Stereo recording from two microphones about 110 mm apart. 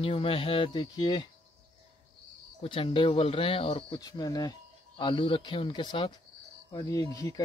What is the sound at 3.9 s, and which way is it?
Speech, 40° left (ahead or behind).